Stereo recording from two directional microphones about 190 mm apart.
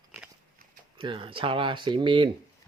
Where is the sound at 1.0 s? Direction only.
25° right (ahead or behind).